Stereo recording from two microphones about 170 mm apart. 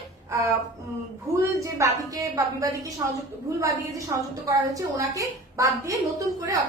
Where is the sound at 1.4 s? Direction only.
20° right (ahead or behind).